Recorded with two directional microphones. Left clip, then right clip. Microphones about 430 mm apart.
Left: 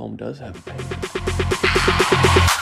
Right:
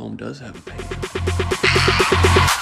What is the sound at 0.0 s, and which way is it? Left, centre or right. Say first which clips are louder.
Music: left 1 dB; centre.